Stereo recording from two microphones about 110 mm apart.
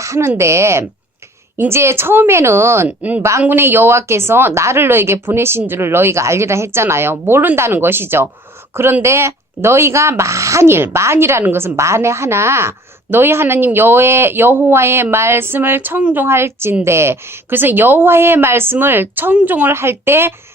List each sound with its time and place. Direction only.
0.0 s speech: 25° right (ahead or behind)